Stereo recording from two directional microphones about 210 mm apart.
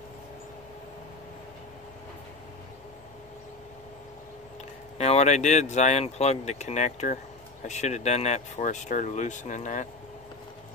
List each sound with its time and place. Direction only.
4.9 s speech: 30° left (ahead or behind)